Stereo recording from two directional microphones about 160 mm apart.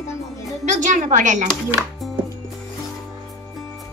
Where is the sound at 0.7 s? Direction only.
50° right (ahead or behind).